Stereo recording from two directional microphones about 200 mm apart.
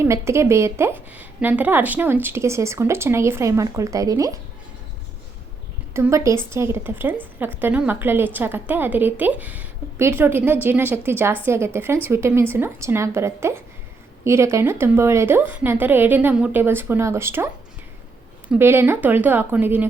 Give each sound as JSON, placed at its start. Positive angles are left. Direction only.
{"t": 0.0, "sound": "a woman's voice", "side_deg": -15}
{"t": 5.9, "sound": "a woman's voice", "side_deg": -15}